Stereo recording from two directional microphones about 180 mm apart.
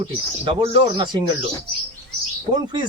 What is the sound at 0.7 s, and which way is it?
Speech, 25° right (ahead or behind).